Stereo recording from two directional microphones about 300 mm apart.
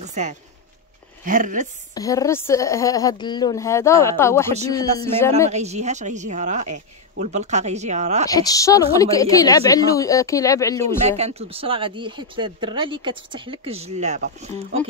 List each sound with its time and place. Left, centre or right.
0.0 s a sound: right
1.2 s speech: right
2.0 s a woman's voice: centre
5.5 s speech: right
8.3 s a woman's voice: centre
11.1 s speech: right